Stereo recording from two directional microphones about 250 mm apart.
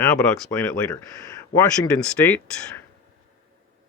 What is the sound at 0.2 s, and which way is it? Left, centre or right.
Speech, centre.